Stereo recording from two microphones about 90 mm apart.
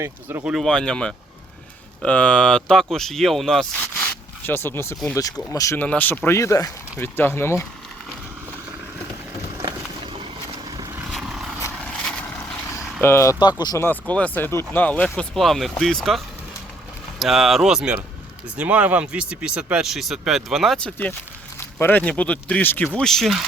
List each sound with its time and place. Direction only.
0.0 s speech: 25° right (ahead or behind)
0.6 s speech: 10° left (ahead or behind)
4.4 s speech: 25° left (ahead or behind)
5.7 s speech: 20° left (ahead or behind); by 6.7 s 35° left (ahead or behind)
7.0 s speech: 25° left (ahead or behind)
11.1 s vehicle: 5° right (ahead or behind)
13.0 s speech: 30° left (ahead or behind)
13.4 s speech: 50° left (ahead or behind)
13.7 s speech: 20° left (ahead or behind); by 20.8 s centre (ahead or behind)
21.8 s speech: 20° left (ahead or behind)
23.0 s speech: 5° left (ahead or behind)